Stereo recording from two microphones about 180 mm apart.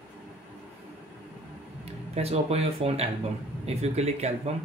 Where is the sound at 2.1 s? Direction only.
35° right (ahead or behind).